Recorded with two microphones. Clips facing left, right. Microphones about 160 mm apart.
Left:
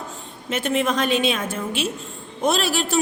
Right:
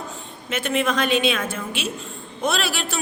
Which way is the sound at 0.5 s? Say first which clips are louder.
Left 1 dB; 40° left (ahead or behind).